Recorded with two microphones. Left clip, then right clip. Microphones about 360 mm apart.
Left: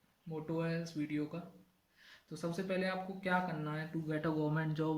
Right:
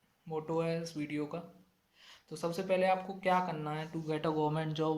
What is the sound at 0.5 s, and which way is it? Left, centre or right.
Speech, centre.